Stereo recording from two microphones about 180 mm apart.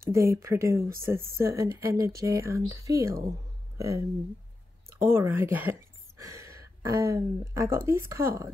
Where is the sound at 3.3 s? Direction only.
15° right (ahead or behind).